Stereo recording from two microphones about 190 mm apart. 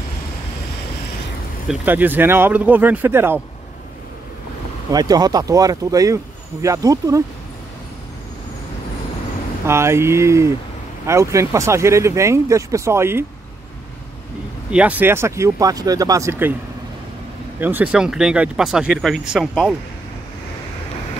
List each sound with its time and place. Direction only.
1.7 s speech: 10° right (ahead or behind)
4.9 s speech: 20° right (ahead or behind)
9.7 s speech: 15° right (ahead or behind)
14.7 s speech: 5° right (ahead or behind)
17.6 s speech: 10° right (ahead or behind)